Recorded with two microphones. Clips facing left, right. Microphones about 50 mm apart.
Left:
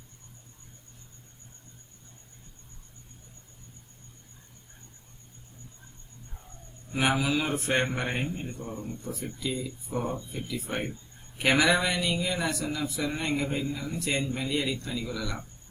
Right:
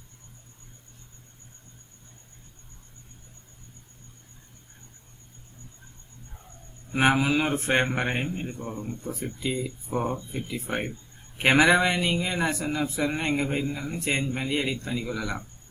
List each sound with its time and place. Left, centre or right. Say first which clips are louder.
6.9 s a man's voice: right 4 dB; right
9.1 s speech: right 2 dB; centre
9.4 s a man's voice: right 3 dB; right
10.1 s speech: right 2 dB; centre
11.3 s a man's voice: right 4 dB; right